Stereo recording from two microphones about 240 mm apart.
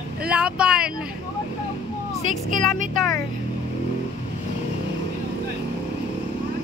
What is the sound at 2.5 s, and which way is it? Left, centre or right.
Speech, right.